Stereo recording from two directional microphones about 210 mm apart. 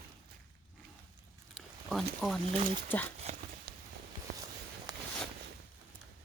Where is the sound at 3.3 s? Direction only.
35° right (ahead or behind).